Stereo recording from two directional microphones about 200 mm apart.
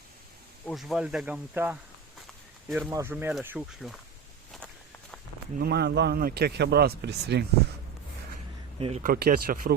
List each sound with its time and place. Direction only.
0.7 s speech: centre (ahead or behind)
2.9 s speech: 10° right (ahead or behind)
5.5 s a man's voice: 50° right (ahead or behind)
9.0 s speech: 50° right (ahead or behind)